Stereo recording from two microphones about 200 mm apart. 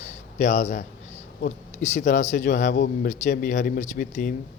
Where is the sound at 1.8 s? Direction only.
40° left (ahead or behind).